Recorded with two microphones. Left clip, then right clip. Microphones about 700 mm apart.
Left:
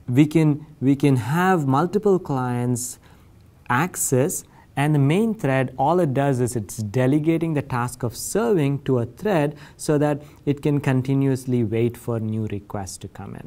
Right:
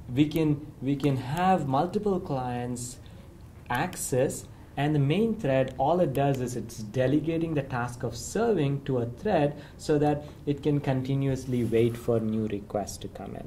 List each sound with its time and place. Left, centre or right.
0.1 s speech: left